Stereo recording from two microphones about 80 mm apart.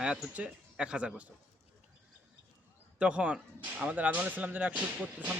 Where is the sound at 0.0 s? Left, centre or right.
Centre.